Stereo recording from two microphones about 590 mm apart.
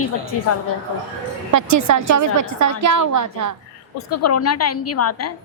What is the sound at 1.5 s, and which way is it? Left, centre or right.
A woman's voice, right.